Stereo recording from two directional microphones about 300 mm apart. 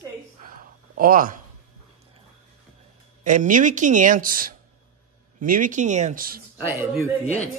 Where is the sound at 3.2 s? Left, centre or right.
Right.